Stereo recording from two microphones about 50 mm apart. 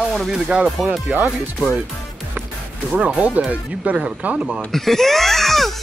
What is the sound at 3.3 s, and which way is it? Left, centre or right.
Speech, right.